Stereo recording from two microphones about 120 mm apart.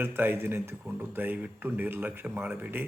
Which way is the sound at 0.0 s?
20° right (ahead or behind).